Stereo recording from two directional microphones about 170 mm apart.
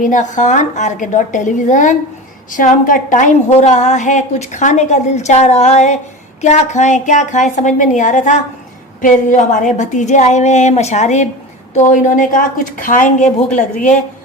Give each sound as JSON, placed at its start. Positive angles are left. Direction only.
{"t": 0.0, "sound": "a woman's voice", "side_deg": 50}